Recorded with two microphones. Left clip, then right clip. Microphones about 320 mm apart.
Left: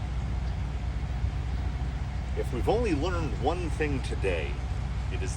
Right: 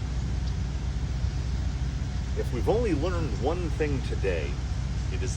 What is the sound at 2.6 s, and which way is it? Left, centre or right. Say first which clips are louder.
Speech: right 1 dB; left.